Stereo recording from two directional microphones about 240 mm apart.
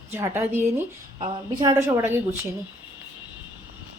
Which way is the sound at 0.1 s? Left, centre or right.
Centre.